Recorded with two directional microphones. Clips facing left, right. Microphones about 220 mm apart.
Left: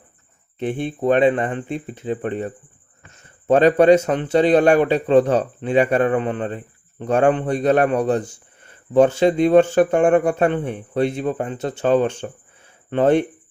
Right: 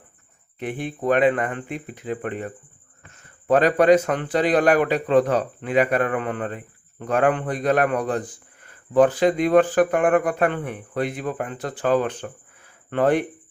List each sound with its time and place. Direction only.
0.6 s a man's voice: 25° left (ahead or behind)